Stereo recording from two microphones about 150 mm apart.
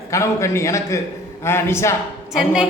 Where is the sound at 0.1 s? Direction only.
20° left (ahead or behind).